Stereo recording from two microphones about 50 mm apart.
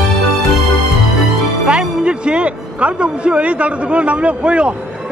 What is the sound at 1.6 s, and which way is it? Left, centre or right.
Speech, right.